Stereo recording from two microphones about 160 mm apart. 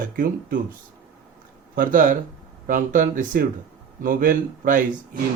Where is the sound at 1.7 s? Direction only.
60° right (ahead or behind).